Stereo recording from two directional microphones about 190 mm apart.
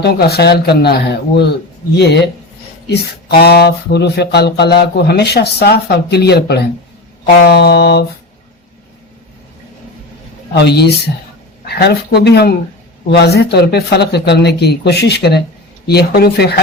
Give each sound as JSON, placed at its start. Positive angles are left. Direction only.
{"t": 0.0, "sound": "speech", "side_deg": 55}
{"t": 10.5, "sound": "speech", "side_deg": 60}